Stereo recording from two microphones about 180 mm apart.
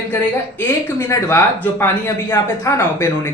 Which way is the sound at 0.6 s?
15° left (ahead or behind).